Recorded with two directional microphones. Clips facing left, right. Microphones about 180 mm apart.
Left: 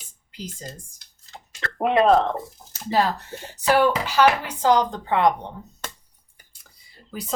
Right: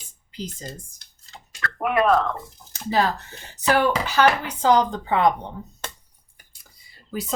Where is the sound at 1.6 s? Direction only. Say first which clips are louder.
Left 2 dB; 25° left (ahead or behind).